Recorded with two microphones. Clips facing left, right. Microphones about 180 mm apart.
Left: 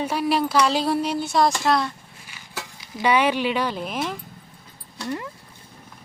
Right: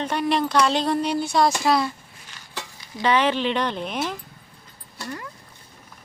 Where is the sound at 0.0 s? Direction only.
5° left (ahead or behind).